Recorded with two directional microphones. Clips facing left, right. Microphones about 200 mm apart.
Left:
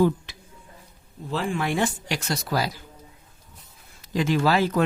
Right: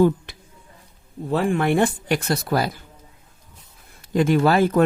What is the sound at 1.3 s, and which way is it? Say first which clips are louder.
Speech: right 6 dB; 55° right (ahead or behind).